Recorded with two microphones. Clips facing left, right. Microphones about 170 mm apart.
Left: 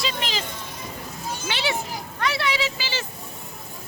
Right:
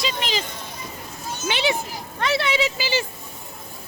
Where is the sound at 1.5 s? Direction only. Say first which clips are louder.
Right 4 dB; 20° right (ahead or behind).